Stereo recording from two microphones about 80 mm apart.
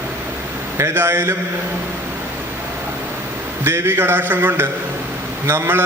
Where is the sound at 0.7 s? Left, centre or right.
Right.